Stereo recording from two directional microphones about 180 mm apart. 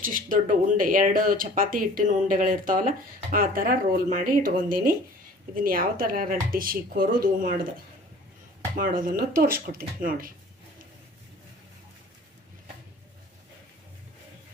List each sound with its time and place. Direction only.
0.0 s speech: 50° right (ahead or behind)
8.7 s speech: 50° right (ahead or behind)